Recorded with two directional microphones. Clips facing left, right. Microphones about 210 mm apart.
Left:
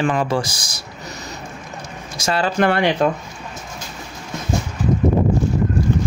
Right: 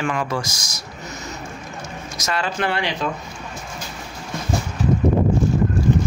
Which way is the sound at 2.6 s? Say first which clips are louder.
Left 10 dB; 55° left (ahead or behind).